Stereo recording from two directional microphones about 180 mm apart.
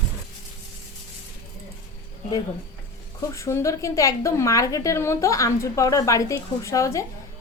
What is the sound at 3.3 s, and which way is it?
A woman's voice, 15° left (ahead or behind).